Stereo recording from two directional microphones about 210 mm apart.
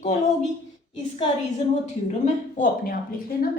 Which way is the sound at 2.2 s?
40° left (ahead or behind).